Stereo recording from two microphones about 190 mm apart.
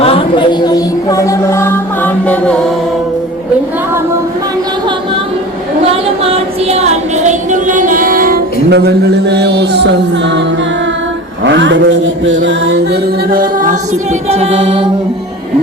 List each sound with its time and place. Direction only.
0.0 s music: 30° left (ahead or behind); by 2.7 s 5° left (ahead or behind)
6.3 s music: 35° right (ahead or behind); by 10.4 s 65° right (ahead or behind)
11.4 s chant: 75° right (ahead or behind); by 14.8 s 30° right (ahead or behind)